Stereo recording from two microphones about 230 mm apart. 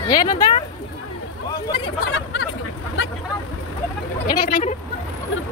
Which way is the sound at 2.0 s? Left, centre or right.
Left.